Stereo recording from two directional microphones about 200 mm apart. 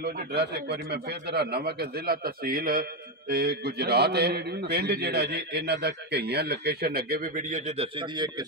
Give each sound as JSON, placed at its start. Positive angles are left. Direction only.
{"t": 0.0, "sound": "a man's voice", "side_deg": -55}